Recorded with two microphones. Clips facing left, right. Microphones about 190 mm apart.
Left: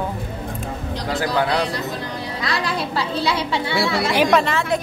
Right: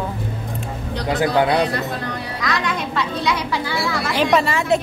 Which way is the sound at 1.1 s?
20° right (ahead or behind).